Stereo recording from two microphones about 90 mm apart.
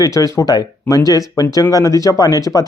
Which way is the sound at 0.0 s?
35° left (ahead or behind).